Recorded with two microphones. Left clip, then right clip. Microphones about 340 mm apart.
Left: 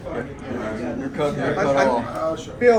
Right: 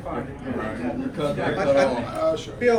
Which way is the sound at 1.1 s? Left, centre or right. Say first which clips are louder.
Left 3 dB; left.